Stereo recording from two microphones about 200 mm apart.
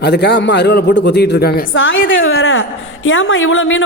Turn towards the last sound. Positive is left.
turn(degrees=75)  # may be behind; listen again after turning